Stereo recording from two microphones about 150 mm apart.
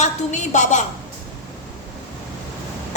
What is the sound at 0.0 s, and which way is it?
Speech, 50° left (ahead or behind).